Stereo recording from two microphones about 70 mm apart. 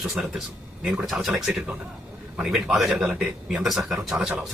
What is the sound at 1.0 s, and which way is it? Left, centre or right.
Speech, centre.